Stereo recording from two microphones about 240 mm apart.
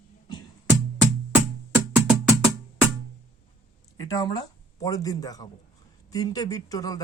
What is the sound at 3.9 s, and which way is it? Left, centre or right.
Speech, centre.